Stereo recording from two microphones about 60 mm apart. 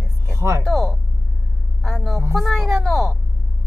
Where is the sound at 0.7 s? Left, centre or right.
Centre.